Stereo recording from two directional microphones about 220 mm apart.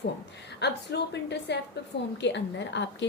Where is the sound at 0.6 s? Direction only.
50° left (ahead or behind).